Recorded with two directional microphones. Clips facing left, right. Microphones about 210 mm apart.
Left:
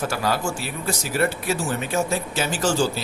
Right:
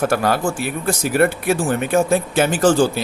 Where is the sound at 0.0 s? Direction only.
55° right (ahead or behind).